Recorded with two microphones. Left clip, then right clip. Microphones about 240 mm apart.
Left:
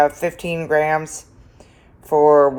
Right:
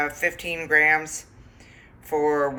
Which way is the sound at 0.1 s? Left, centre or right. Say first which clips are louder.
Left 3 dB; centre.